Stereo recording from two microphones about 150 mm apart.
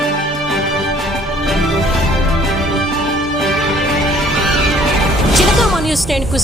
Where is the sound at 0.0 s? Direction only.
Centre (ahead or behind).